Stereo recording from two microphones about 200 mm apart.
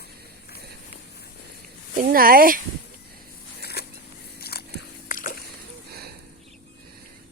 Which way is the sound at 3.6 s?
55° left (ahead or behind).